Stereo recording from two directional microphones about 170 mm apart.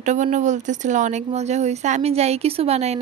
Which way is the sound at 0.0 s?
45° right (ahead or behind).